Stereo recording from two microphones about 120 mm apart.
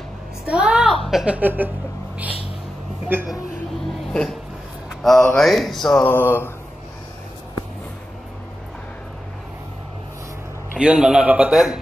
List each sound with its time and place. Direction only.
0.5 s a sound: 5° right (ahead or behind)
1.0 s a man's voice: 5° right (ahead or behind)
3.1 s a man's voice: 15° right (ahead or behind)
4.1 s speech: 5° left (ahead or behind)
5.0 s a sound: 5° left (ahead or behind)
6.0 s speech: 20° left (ahead or behind)
10.7 s a man's voice: 5° right (ahead or behind)